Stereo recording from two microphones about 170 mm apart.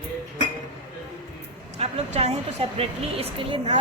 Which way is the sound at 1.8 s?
40° right (ahead or behind).